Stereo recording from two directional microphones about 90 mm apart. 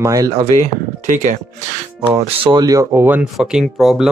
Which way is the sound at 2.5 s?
40° right (ahead or behind).